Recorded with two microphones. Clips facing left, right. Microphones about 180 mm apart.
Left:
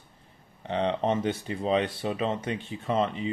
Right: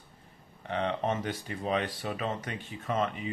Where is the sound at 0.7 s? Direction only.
25° left (ahead or behind).